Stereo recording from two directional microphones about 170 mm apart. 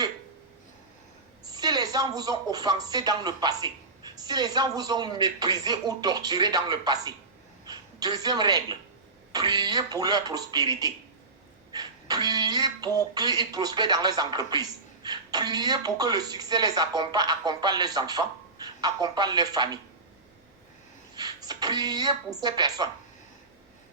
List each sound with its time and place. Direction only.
1.5 s a woman's voice: 25° right (ahead or behind)
21.2 s a sound: 25° right (ahead or behind)
22.4 s speech: 25° right (ahead or behind)